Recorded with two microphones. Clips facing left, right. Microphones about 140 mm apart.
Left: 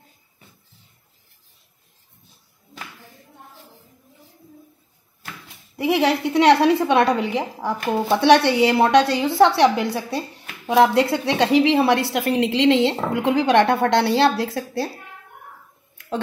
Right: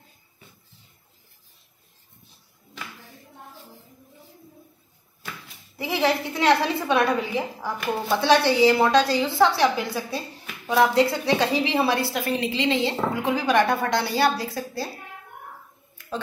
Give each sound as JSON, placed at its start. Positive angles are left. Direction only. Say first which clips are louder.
{"t": 5.8, "sound": "a woman's voice", "louder": "left 4 dB", "side_deg": 65}